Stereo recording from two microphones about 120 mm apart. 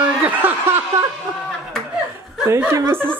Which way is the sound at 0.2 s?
15° right (ahead or behind).